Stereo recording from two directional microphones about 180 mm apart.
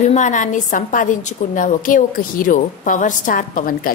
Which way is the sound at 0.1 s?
45° left (ahead or behind).